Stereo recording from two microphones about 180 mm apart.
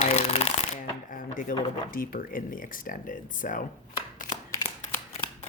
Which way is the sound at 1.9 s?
50° left (ahead or behind).